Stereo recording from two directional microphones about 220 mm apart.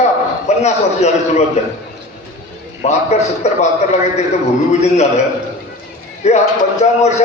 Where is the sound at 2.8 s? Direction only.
30° left (ahead or behind).